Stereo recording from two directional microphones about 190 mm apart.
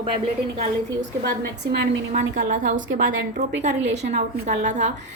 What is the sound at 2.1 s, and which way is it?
A woman's voice, 45° right (ahead or behind).